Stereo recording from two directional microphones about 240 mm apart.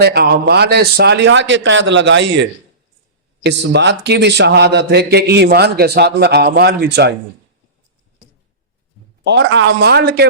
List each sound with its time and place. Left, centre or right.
0.0 s a man's voice: right
9.2 s a man's voice: right